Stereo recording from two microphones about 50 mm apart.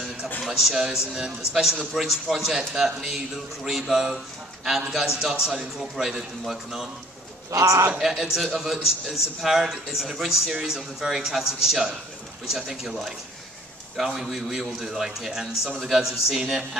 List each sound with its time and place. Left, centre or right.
0.4 s a man's voice: centre
7.6 s speech: right
8.0 s a man's voice: centre